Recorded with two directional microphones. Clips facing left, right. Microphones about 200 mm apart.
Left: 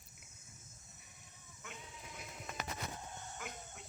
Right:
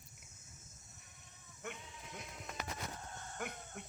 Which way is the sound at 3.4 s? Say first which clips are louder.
Right 6 dB; 60° right (ahead or behind).